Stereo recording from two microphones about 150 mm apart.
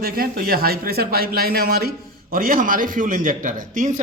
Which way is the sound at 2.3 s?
70° right (ahead or behind).